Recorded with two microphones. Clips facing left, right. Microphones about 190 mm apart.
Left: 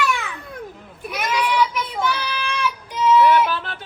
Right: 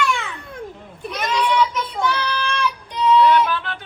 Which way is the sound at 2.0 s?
5° left (ahead or behind).